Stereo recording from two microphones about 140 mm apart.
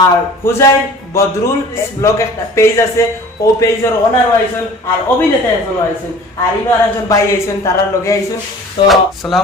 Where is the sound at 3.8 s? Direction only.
20° left (ahead or behind).